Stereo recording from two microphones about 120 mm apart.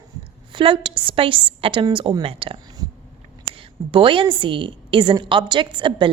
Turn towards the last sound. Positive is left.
turn(degrees=-40)  # may be behind; listen again after turning